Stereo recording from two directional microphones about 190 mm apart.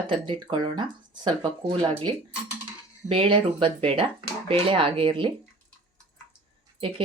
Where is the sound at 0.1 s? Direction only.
25° right (ahead or behind).